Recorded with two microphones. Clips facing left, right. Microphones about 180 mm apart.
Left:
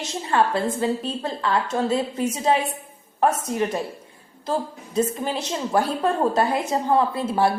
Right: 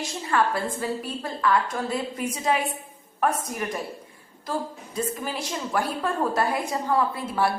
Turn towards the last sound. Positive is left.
turn(degrees=25)  # may be behind; listen again after turning